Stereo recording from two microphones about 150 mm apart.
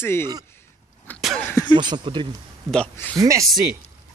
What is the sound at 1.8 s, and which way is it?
Speech, 30° right (ahead or behind).